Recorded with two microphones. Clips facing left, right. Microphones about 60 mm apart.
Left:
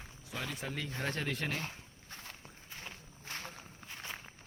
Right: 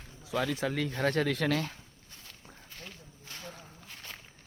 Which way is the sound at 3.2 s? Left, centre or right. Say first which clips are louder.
Left 1 dB; left.